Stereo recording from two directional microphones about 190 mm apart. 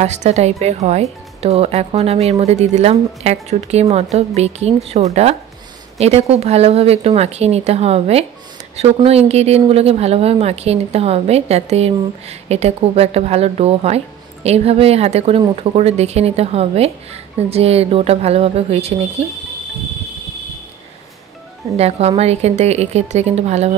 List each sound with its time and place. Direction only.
0.0 s speech: 35° right (ahead or behind)
21.7 s speech: 35° right (ahead or behind)